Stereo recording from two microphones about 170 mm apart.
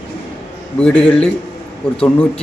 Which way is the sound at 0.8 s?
5° left (ahead or behind).